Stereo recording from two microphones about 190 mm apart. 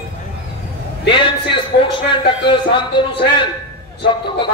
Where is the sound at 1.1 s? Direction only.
25° left (ahead or behind).